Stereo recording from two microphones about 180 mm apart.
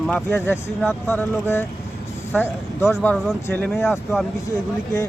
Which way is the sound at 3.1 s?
Centre (ahead or behind).